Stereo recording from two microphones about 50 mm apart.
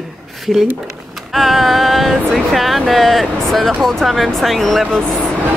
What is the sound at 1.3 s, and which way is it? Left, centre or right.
Speech, centre.